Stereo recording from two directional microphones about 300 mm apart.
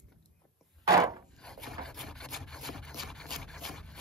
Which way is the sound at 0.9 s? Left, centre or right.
Centre.